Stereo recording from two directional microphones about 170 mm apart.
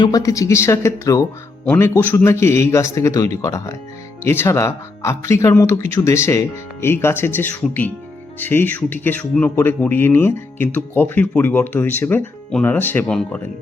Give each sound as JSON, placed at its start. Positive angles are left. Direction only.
{"t": 0.0, "sound": "speech", "side_deg": 20}